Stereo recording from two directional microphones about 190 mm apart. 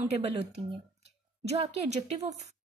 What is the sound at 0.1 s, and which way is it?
Speech, 35° right (ahead or behind).